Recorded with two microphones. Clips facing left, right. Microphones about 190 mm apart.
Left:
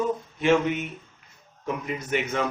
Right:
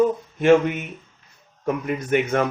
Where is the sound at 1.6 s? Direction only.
55° right (ahead or behind).